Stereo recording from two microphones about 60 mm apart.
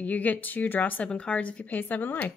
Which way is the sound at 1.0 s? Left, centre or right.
Centre.